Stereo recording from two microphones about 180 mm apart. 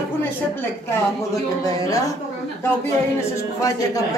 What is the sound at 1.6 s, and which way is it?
Speech, 20° left (ahead or behind).